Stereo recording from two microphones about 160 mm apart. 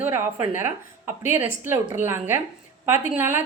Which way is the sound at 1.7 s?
15° right (ahead or behind).